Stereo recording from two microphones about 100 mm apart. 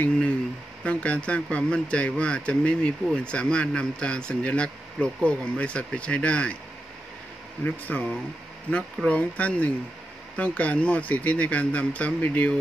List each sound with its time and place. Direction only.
0.8 s speech: 15° left (ahead or behind)
7.6 s speech: 15° left (ahead or behind)